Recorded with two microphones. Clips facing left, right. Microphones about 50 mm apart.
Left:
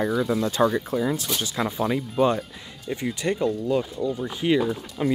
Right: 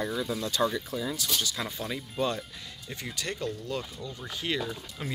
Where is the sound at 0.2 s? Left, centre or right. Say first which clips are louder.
Left 6 dB; left.